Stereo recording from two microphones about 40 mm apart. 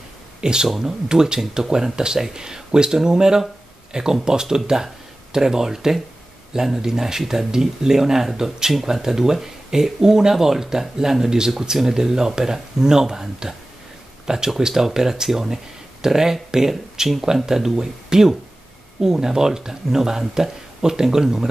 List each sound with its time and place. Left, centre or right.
0.4 s speech: centre